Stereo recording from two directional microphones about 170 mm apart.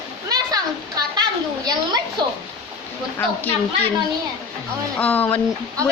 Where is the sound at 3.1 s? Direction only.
10° left (ahead or behind).